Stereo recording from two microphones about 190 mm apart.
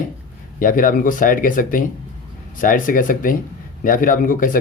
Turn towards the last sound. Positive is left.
turn(degrees=45)  # may be behind; listen again after turning